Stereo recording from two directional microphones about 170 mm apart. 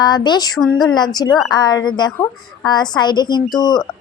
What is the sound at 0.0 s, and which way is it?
Speech, 25° left (ahead or behind).